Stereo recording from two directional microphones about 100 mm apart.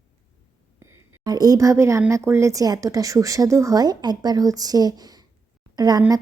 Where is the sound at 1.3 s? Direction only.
40° right (ahead or behind).